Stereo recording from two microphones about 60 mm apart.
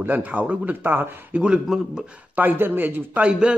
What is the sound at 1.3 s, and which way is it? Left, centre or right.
A man's voice, centre.